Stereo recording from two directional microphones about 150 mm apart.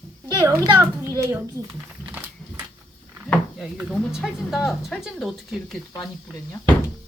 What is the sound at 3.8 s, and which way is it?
Speech, 5° right (ahead or behind).